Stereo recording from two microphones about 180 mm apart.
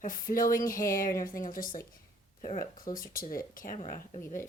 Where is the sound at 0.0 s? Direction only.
50° left (ahead or behind).